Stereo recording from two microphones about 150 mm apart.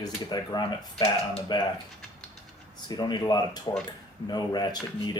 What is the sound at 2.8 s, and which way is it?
Speech, 30° left (ahead or behind).